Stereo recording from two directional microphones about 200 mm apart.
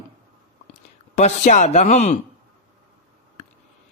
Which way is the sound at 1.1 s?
35° left (ahead or behind).